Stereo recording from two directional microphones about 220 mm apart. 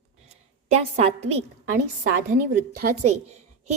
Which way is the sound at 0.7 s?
30° right (ahead or behind).